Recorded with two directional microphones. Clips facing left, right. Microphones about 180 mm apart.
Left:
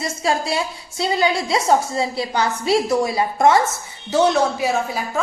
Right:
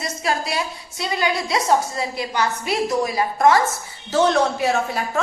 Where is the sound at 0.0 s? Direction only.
30° left (ahead or behind).